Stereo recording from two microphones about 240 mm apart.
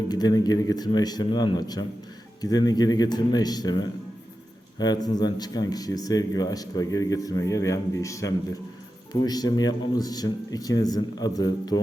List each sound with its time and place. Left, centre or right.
0.1 s speech: centre